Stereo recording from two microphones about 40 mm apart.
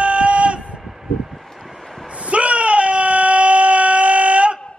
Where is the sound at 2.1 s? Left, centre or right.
Right.